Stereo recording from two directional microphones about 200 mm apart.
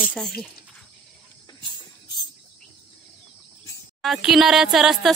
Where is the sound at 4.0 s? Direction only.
Centre (ahead or behind).